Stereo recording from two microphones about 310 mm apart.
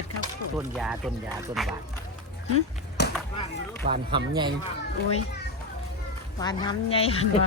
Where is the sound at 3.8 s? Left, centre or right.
Right.